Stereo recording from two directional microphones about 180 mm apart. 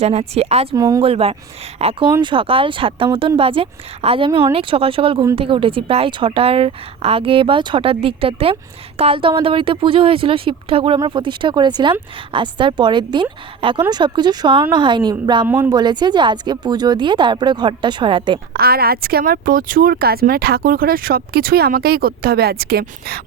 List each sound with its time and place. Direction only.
0.0 s a woman's voice: 35° right (ahead or behind)
0.8 s speech: 20° right (ahead or behind)
1.0 s a woman's voice: 35° right (ahead or behind)
4.3 s speech: 15° right (ahead or behind)
4.5 s a woman's voice: 30° right (ahead or behind)
15.4 s speech: 10° right (ahead or behind)
15.7 s speech: 25° right (ahead or behind)
18.5 s speech: 60° right (ahead or behind)